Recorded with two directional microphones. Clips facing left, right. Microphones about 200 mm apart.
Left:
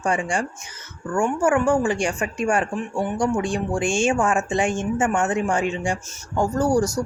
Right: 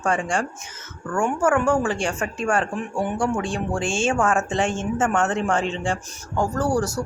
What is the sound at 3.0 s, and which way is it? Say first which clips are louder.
Speech: left 1 dB; 5° right (ahead or behind).